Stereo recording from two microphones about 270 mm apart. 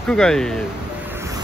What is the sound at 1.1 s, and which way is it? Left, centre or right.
Music, centre.